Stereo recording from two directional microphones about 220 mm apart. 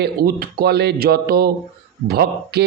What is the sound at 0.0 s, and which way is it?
Speech, 45° right (ahead or behind).